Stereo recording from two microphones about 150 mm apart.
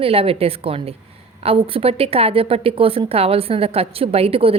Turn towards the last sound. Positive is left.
turn(degrees=-40)  # may be behind; listen again after turning